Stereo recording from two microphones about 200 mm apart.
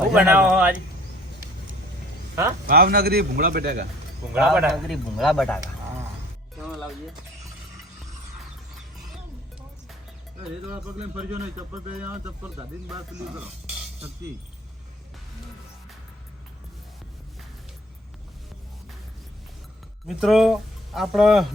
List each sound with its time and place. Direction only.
0.1 s speech: 5° right (ahead or behind)
2.3 s speech: 15° right (ahead or behind)
2.6 s a man's voice: 50° right (ahead or behind)
4.4 s speech: 5° right (ahead or behind)
6.6 s music: centre (ahead or behind)
10.7 s speech: 5° right (ahead or behind)
20.1 s speech: centre (ahead or behind)